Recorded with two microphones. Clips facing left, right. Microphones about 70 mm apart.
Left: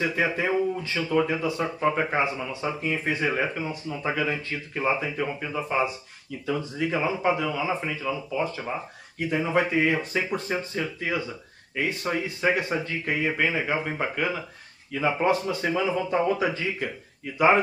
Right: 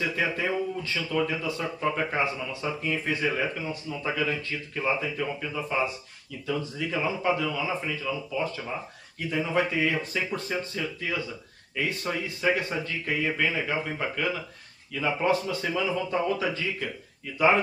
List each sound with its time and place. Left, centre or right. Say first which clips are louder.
0.0 s speech: left 3 dB; left
10.1 s speech: left 3 dB; centre
10.7 s speech: left 3 dB; left